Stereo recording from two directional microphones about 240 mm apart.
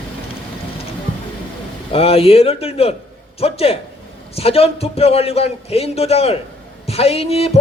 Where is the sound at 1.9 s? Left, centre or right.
Left.